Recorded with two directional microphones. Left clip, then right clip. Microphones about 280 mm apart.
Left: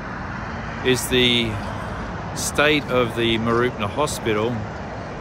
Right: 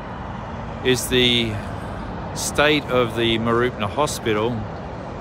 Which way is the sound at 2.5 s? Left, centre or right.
Centre.